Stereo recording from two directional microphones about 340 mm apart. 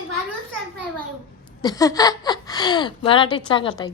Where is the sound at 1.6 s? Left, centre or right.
Centre.